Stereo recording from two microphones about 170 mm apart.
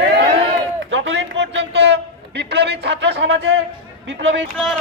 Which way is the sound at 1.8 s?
90° right.